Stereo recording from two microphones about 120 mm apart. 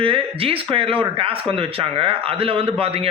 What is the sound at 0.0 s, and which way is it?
Speech, 50° right (ahead or behind).